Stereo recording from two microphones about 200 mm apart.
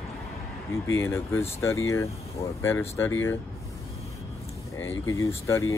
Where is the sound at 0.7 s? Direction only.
15° left (ahead or behind).